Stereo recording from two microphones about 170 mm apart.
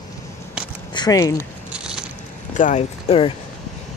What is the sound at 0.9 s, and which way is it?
Speech, 25° left (ahead or behind).